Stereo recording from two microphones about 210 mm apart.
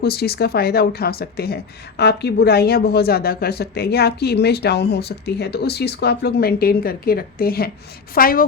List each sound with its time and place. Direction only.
0.0 s a woman's voice: 50° left (ahead or behind)